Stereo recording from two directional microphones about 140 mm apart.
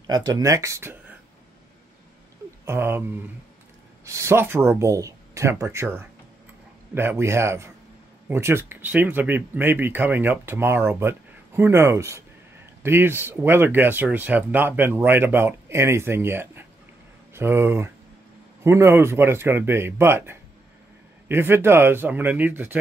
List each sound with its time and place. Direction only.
0.0 s speech: 25° right (ahead or behind)
2.6 s speech: 15° right (ahead or behind)